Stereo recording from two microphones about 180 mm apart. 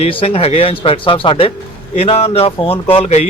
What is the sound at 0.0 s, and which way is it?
Speech, 30° left (ahead or behind).